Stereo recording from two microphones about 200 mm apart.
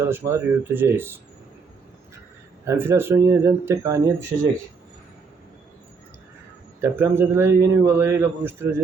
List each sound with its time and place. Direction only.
0.0 s a man's voice: 15° right (ahead or behind)
2.6 s a man's voice: 10° right (ahead or behind)
6.8 s a man's voice: 10° right (ahead or behind)